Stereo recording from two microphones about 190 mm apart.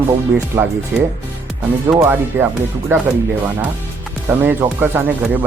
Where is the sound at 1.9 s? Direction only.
15° right (ahead or behind).